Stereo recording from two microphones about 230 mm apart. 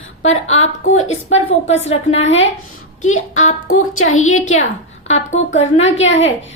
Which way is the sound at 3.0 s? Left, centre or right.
Left.